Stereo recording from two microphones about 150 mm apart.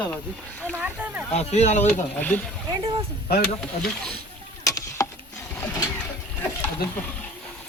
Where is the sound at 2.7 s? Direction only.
30° right (ahead or behind).